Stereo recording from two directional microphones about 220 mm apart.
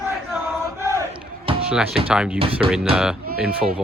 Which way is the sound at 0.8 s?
15° right (ahead or behind).